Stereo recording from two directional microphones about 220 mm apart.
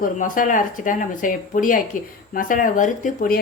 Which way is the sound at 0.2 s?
40° left (ahead or behind).